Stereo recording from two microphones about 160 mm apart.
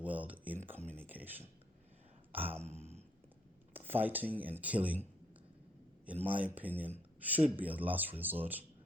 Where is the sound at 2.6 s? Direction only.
40° right (ahead or behind).